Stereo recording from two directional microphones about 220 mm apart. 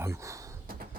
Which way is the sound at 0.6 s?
45° right (ahead or behind).